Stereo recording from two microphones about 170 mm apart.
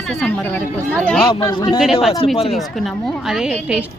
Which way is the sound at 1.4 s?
25° left (ahead or behind).